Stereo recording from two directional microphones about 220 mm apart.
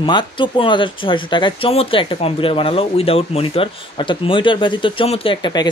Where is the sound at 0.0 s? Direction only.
20° left (ahead or behind).